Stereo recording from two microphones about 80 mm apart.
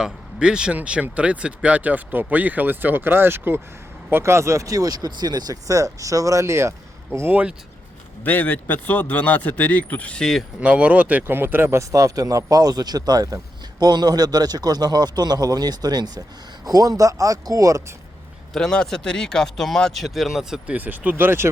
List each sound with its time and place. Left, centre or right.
0.0 s speech: centre; by 7.4 s right
8.2 s speech: left
10.6 s speech: centre
11.8 s speech: right
18.5 s speech: centre
20.7 s speech: right